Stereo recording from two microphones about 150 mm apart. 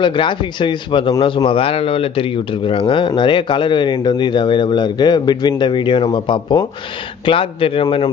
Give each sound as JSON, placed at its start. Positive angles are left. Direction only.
{"t": 0.0, "sound": "speech", "side_deg": 35}